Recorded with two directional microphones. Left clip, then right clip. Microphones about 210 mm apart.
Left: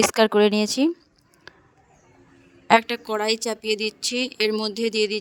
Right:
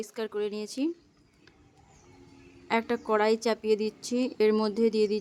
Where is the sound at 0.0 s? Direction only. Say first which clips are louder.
Left 15 dB; 50° left (ahead or behind).